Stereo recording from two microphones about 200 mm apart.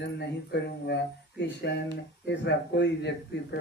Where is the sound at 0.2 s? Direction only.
55° left (ahead or behind).